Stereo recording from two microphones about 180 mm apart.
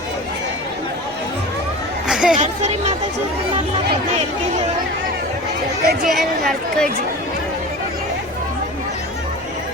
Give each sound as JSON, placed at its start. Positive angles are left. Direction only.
{"t": 2.0, "sound": "a sound", "side_deg": -5}
{"t": 2.3, "sound": "speech", "side_deg": -40}
{"t": 5.8, "sound": "speech", "side_deg": -55}
{"t": 6.1, "sound": "speech", "side_deg": 0}